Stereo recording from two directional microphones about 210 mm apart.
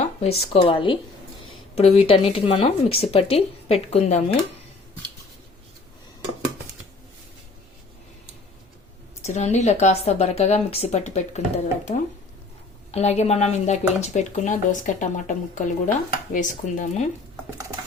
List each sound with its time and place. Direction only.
0.0 s speech: 30° left (ahead or behind)
9.2 s speech: 35° left (ahead or behind)